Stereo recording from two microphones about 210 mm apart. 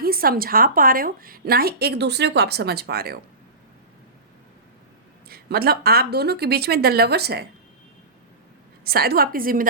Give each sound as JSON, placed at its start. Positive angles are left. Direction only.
{"t": 0.0, "sound": "speech", "side_deg": -45}
{"t": 5.3, "sound": "speech", "side_deg": -45}
{"t": 8.8, "sound": "speech", "side_deg": -45}